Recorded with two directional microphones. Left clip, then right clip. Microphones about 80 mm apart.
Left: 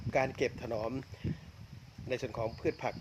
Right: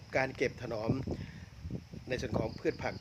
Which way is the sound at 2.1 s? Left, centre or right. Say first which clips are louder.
Even; right.